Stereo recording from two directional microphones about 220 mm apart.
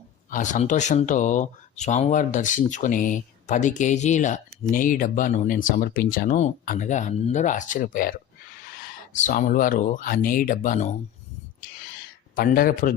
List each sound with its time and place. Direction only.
0.3 s speech: 35° left (ahead or behind)
12.4 s speech: 40° left (ahead or behind)